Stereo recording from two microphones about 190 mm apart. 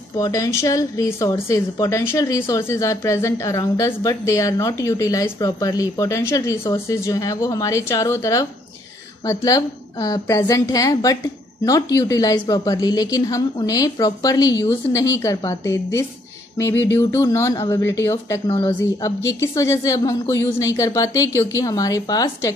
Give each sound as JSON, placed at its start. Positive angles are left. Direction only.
{"t": 0.2, "sound": "a woman's voice", "side_deg": 15}